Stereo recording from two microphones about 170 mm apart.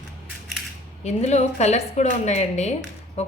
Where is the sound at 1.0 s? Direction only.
40° left (ahead or behind).